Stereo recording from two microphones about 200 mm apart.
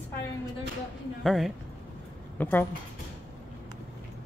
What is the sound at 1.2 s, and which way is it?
A woman's voice, centre (ahead or behind).